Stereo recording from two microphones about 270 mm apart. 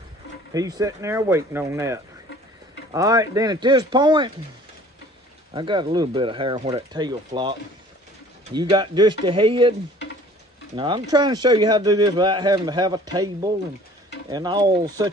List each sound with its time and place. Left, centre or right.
0.5 s speech: centre
5.5 s speech: centre
8.5 s speech: centre
10.8 s speech: centre